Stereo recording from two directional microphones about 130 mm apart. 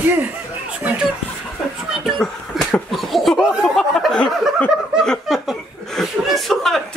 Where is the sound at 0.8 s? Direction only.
5° right (ahead or behind).